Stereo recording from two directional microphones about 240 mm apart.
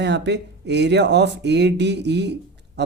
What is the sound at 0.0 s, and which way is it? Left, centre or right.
Speech, right.